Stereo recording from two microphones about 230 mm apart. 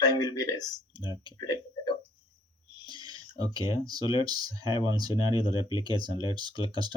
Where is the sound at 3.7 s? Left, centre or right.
Centre.